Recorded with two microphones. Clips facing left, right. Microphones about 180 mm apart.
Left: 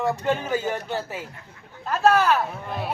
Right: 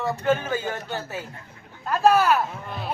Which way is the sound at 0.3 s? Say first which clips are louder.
Even; 15° left (ahead or behind).